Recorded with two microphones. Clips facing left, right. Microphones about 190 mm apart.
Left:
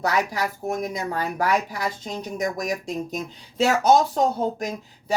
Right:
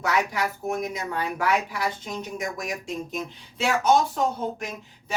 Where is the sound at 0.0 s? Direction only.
35° left (ahead or behind).